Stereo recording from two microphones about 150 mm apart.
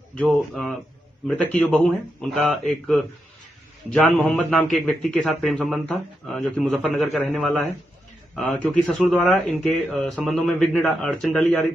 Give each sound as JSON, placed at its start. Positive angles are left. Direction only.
{"t": 0.1, "sound": "a man's voice", "side_deg": 5}